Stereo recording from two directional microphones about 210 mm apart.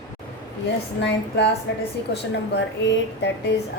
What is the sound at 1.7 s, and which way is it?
Speech, 60° left (ahead or behind).